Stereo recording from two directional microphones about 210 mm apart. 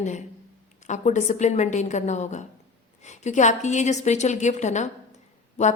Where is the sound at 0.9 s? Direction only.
35° left (ahead or behind).